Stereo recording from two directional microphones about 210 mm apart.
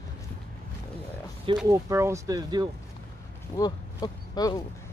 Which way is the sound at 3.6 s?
20° left (ahead or behind).